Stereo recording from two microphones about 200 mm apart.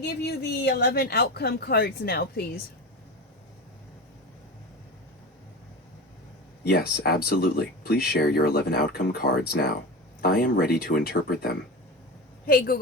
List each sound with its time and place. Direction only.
0.2 s speech: 55° left (ahead or behind)
6.7 s speech: 50° left (ahead or behind)